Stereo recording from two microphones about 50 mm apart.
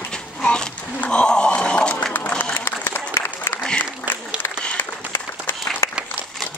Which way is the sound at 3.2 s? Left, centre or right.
Left.